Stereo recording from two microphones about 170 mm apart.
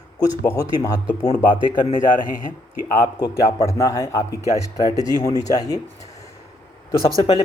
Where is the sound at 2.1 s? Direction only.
55° left (ahead or behind).